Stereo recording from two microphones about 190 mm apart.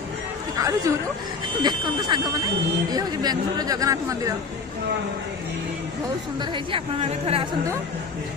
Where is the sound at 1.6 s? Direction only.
20° right (ahead or behind).